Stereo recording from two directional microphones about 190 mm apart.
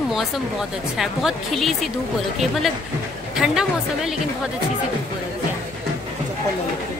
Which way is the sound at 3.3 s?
5° right (ahead or behind).